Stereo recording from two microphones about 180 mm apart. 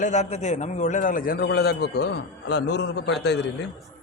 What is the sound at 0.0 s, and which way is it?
A man's voice, 40° left (ahead or behind).